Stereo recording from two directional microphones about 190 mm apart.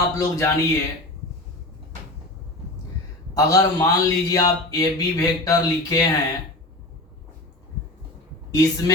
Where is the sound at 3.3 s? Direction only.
20° left (ahead or behind).